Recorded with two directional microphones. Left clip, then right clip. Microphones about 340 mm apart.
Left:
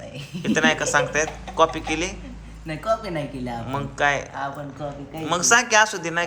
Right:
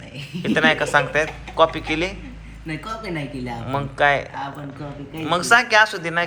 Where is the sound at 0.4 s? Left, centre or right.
Centre.